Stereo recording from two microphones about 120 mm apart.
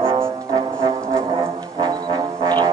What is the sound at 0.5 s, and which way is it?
Brass instrument, 25° right (ahead or behind).